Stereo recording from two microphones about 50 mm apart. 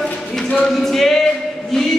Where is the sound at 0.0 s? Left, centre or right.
Centre.